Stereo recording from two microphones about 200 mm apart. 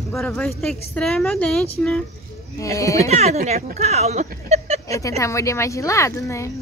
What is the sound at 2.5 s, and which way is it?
Speech, 15° left (ahead or behind).